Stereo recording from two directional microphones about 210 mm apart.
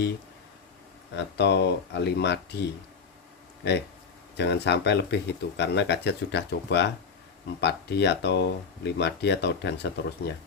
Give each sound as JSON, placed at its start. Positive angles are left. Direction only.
{"t": 1.1, "sound": "speech", "side_deg": 55}